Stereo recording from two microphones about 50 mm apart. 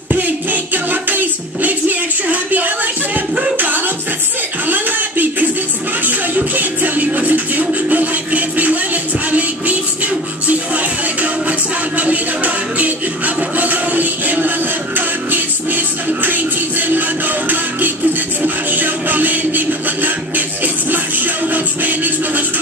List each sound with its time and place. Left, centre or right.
0.1 s music: right
4.6 s a sound: right
6.0 s music: right